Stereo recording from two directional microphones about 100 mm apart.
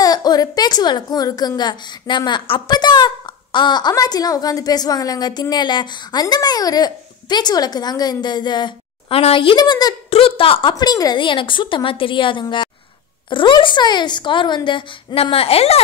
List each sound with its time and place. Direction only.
0.0 s a woman's voice: 40° left (ahead or behind)
9.1 s a woman's voice: 65° left (ahead or behind)
9.6 s a woman's voice: 40° left (ahead or behind)
10.0 s a woman's voice: 65° left (ahead or behind)
10.7 s a woman's voice: 40° left (ahead or behind)
11.2 s a woman's voice: 55° left (ahead or behind)
15.3 s speech: 85° left